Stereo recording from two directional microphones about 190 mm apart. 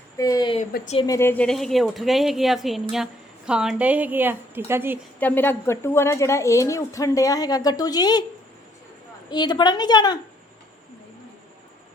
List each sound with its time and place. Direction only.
0.2 s a woman's voice: 20° left (ahead or behind); by 4.9 s 10° right (ahead or behind)
5.2 s a woman's voice: 10° left (ahead or behind)
9.3 s a woman's voice: 20° left (ahead or behind)